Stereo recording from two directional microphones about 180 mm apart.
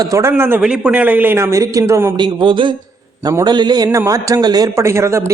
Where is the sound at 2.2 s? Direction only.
30° right (ahead or behind).